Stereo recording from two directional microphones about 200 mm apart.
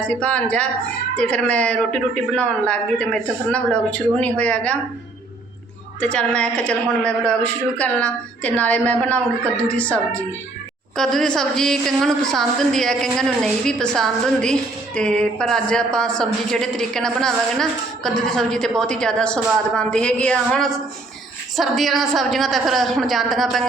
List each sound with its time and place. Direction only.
0.0 s a woman's voice: 5° left (ahead or behind)
6.0 s a woman's voice: 5° left (ahead or behind)